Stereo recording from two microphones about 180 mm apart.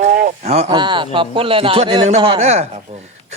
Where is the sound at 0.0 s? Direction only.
50° right (ahead or behind).